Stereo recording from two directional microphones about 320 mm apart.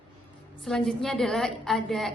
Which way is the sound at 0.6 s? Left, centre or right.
Centre.